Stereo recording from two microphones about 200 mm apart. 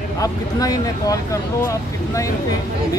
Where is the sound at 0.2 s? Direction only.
15° left (ahead or behind).